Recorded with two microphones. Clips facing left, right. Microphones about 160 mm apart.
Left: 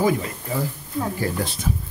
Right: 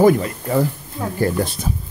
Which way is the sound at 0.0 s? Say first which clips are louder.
Right 7 dB; 60° right (ahead or behind).